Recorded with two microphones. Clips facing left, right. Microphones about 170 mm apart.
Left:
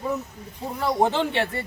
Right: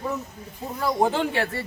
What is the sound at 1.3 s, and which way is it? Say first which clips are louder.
Speech: left 1 dB; 25° left (ahead or behind).